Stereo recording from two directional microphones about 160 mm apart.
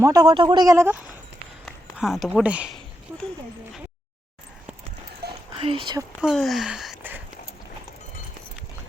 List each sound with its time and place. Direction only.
0.0 s a man's voice: 20° right (ahead or behind)
5.2 s a sound: 90° right
5.5 s speech: 35° right (ahead or behind)
6.2 s speech: centre (ahead or behind)